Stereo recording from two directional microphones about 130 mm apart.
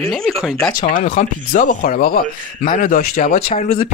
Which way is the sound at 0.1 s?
Centre (ahead or behind).